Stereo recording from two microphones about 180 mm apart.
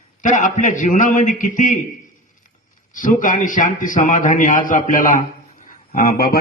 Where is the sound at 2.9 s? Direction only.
45° left (ahead or behind).